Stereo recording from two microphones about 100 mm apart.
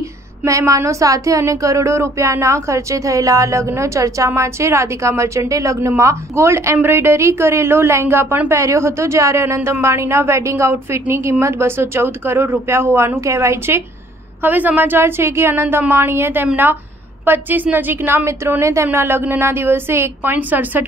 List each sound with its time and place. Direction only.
0.5 s a woman's voice: 30° right (ahead or behind); by 20.8 s 15° right (ahead or behind)